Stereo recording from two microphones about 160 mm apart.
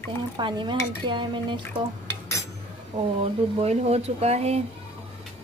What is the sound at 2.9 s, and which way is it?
Speech, 40° right (ahead or behind).